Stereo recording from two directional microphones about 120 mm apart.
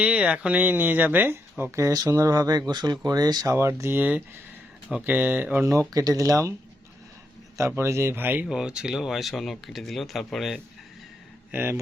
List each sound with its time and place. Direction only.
0.0 s speech: 10° right (ahead or behind)
5.9 s speech: 30° right (ahead or behind)
7.8 s speech: 25° right (ahead or behind); by 10.6 s centre (ahead or behind)
11.5 s speech: 20° right (ahead or behind)